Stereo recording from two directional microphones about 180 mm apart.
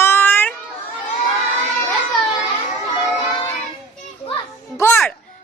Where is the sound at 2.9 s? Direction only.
30° left (ahead or behind).